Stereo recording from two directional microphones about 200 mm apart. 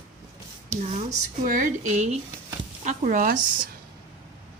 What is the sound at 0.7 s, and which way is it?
Speech, 35° right (ahead or behind).